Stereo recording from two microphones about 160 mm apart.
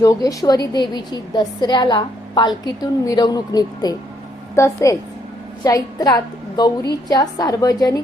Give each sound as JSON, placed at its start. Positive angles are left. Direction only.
{"t": 0.0, "sound": "a woman's voice", "side_deg": 20}